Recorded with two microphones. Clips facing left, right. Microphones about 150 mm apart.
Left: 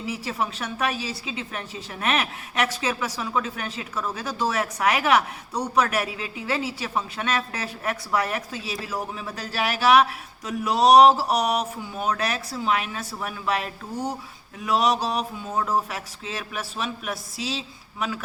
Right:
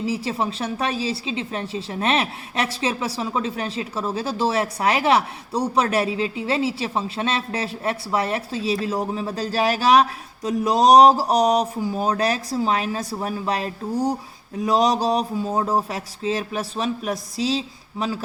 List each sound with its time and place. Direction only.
0.0 s speech: 30° right (ahead or behind)